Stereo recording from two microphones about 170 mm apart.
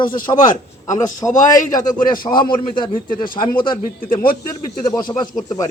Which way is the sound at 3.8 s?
55° left (ahead or behind).